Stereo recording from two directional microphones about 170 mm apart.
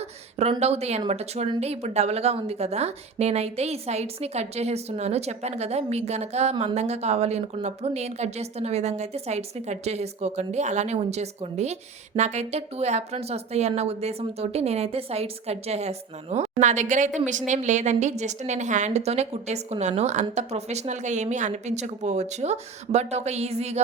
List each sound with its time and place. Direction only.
0.6 s speech: 40° right (ahead or behind)